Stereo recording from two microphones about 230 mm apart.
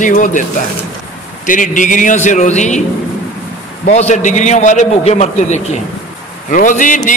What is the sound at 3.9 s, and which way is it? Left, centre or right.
Speech, left.